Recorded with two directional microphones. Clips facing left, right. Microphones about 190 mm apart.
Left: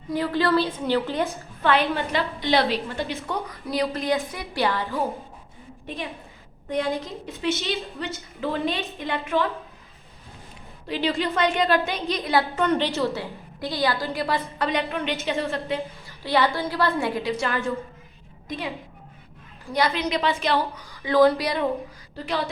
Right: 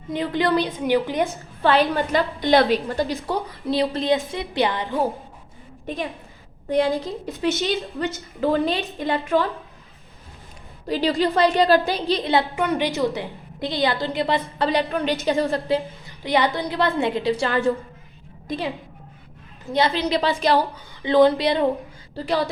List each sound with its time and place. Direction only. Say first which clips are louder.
0.1 s a woman's voice: right 1 dB; 20° right (ahead or behind)
1.6 s a woman's voice: right 3 dB; 35° right (ahead or behind)
2.0 s a woman's voice: right 4 dB; 50° right (ahead or behind)
2.8 s a woman's voice: right 5 dB; 35° right (ahead or behind); by 5.0 s 20° right (ahead or behind)
6.7 s a woman's voice: right 5 dB; 35° right (ahead or behind)
10.8 s a woman's voice: right 4 dB; 40° right (ahead or behind)
12.5 s a woman's voice: right 1 dB; 10° right (ahead or behind)
14.7 s a woman's voice: right 5 dB; 35° right (ahead or behind)
16.0 s a woman's voice: even; 20° right (ahead or behind); by 20.8 s 35° right (ahead or behind)
21.0 s a woman's voice: right 2 dB; 20° right (ahead or behind)